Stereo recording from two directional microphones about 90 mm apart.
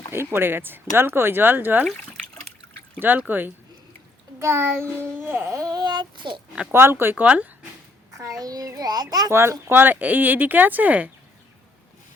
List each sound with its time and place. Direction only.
0.1 s speech: 25° right (ahead or behind)
3.0 s speech: 20° right (ahead or behind)
5.7 s speech: 55° right (ahead or behind)
6.6 s speech: 25° right (ahead or behind)
8.1 s a child's voice: 40° right (ahead or behind)
9.3 s speech: 30° right (ahead or behind)